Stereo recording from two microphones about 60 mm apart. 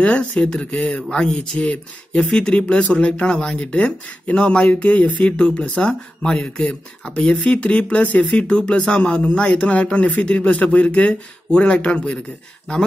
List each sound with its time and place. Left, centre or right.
0.0 s speech: centre